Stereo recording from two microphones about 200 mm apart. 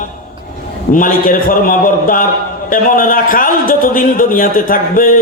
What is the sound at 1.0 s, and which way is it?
Speech, 40° left (ahead or behind).